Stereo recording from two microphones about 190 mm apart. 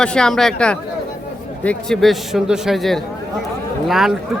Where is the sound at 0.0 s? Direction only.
5° left (ahead or behind).